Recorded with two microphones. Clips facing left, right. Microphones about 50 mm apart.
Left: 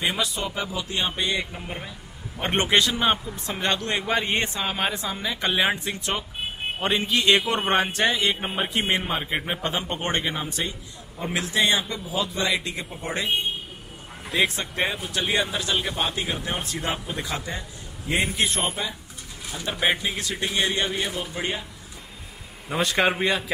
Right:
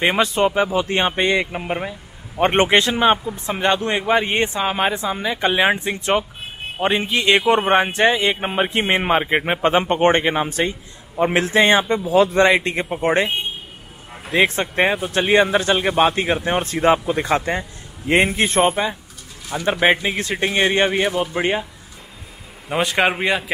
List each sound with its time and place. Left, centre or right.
0.0 s speech: right
2.5 s speech: right
3.0 s a man's voice: centre; by 11.8 s right
12.1 s a man's voice: right
14.3 s speech: right
17.1 s a man's voice: right
22.8 s a man's voice: centre